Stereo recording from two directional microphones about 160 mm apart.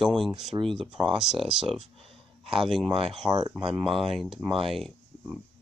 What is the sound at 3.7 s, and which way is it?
Speech, centre (ahead or behind).